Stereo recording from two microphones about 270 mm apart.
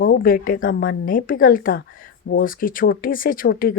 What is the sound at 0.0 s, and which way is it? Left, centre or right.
Speech, left.